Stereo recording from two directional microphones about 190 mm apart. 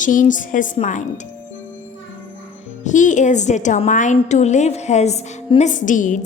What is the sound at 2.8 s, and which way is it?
A woman's voice, 40° left (ahead or behind).